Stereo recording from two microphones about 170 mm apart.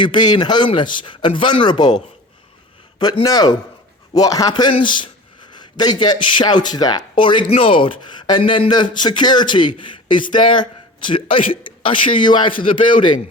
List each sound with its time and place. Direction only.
0.0 s a man's voice: 25° left (ahead or behind)
3.0 s a man's voice: 25° left (ahead or behind)